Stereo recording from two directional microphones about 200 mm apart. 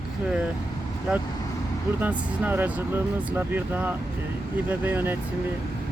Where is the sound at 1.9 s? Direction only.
10° right (ahead or behind).